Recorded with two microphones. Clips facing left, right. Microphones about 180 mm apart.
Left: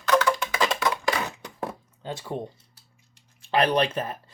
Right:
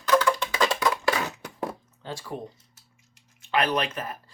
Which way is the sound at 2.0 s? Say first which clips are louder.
Left 2 dB; 20° left (ahead or behind).